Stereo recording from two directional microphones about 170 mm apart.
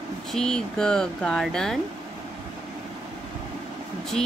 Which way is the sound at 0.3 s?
5° left (ahead or behind).